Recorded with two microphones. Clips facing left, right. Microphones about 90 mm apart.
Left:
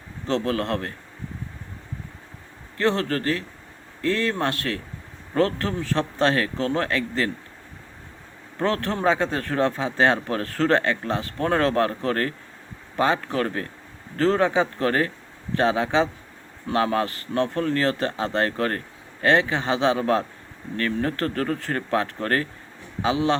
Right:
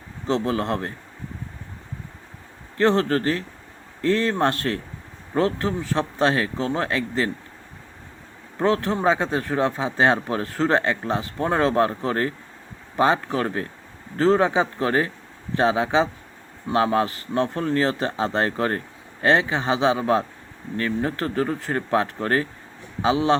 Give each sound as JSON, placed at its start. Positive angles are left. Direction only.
{"t": 0.3, "sound": "speech", "side_deg": -20}
{"t": 2.7, "sound": "speech", "side_deg": -30}
{"t": 5.3, "sound": "speech", "side_deg": -20}
{"t": 8.5, "sound": "speech", "side_deg": -15}